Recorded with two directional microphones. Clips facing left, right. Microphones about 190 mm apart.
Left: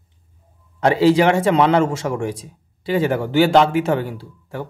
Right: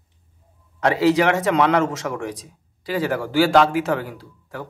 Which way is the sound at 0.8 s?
30° left (ahead or behind).